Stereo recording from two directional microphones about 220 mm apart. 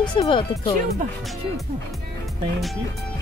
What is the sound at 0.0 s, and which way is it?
Speech, 20° left (ahead or behind).